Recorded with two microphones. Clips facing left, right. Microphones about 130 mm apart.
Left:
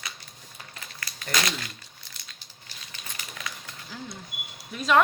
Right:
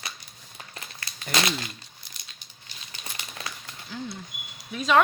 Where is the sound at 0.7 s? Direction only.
30° right (ahead or behind).